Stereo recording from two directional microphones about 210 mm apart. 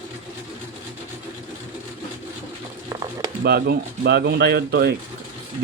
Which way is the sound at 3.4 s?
50° right (ahead or behind).